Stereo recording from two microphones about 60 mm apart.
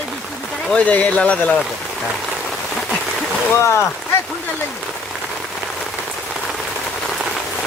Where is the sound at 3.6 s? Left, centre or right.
Left.